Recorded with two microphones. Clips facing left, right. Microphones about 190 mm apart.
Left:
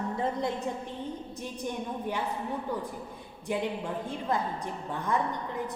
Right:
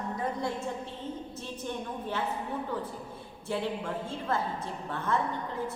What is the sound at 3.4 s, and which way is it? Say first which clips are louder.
A woman's voice: left 1 dB; 15° left (ahead or behind).